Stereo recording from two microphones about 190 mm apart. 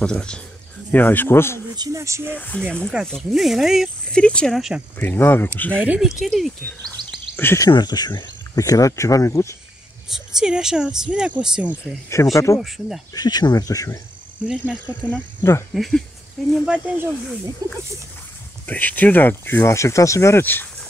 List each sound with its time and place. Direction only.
0.0 s speech: 5° left (ahead or behind)
1.8 s speech: 15° right (ahead or behind)
2.3 s speech: 10° left (ahead or behind)
2.9 s speech: centre (ahead or behind)
4.9 s speech: 10° left (ahead or behind)
5.8 s speech: 5° right (ahead or behind)
7.0 s a sound: 25° right (ahead or behind)
7.3 s speech: 15° left (ahead or behind)
10.0 s speech: 5° right (ahead or behind)
12.1 s speech: 15° left (ahead or behind)
12.5 s speech: centre (ahead or behind)
13.1 s speech: 20° left (ahead or behind); by 17.4 s 5° right (ahead or behind)
17.6 s speech: 20° right (ahead or behind)
18.7 s speech: 10° left (ahead or behind)